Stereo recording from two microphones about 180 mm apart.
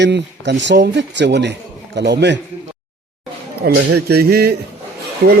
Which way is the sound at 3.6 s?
60° right (ahead or behind).